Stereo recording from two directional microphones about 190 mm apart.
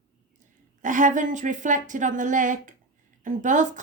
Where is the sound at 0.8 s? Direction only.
40° right (ahead or behind).